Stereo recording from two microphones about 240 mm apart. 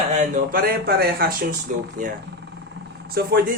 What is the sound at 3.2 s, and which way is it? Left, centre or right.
Speech, right.